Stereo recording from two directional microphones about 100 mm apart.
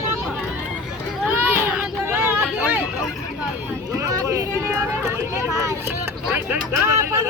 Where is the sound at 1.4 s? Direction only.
20° right (ahead or behind).